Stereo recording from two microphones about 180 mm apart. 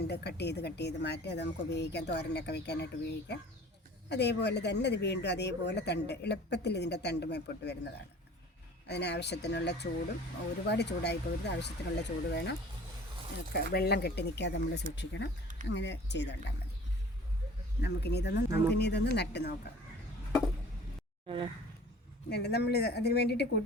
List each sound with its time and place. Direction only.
0.0 s speech: 65° left (ahead or behind)
13.7 s speech: 65° left (ahead or behind)
17.7 s speech: 65° left (ahead or behind)
21.2 s speech: 25° right (ahead or behind)
22.3 s speech: 65° left (ahead or behind)